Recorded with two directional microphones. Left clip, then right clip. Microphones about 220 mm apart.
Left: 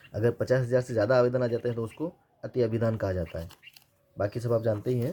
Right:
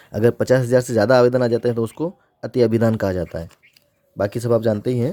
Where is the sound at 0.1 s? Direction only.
45° right (ahead or behind).